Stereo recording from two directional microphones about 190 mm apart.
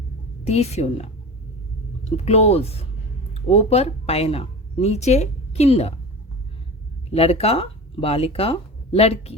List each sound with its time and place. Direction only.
0.4 s speech: 35° left (ahead or behind)
7.1 s speech: 30° left (ahead or behind)